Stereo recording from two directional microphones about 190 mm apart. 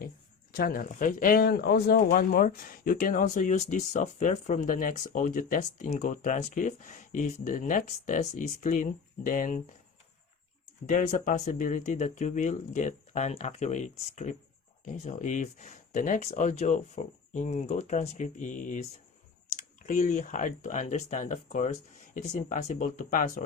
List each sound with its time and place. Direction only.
0.5 s speech: 45° left (ahead or behind)
10.8 s speech: 45° left (ahead or behind)